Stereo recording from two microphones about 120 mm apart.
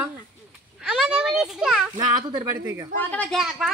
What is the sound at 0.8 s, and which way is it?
A child's voice, 5° right (ahead or behind).